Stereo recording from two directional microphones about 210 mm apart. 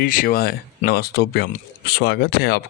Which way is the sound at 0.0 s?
40° left (ahead or behind).